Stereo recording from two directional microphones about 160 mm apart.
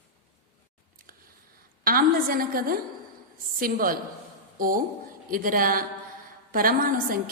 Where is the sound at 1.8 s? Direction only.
65° right (ahead or behind).